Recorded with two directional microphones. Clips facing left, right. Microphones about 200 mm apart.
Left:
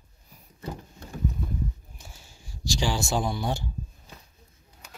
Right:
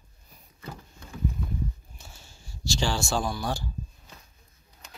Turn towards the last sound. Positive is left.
turn(degrees=20)  # may be behind; listen again after turning